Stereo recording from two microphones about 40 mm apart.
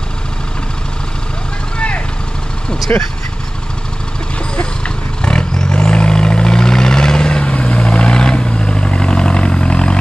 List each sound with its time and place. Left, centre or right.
2.9 s speech: left
4.6 s vehicle: left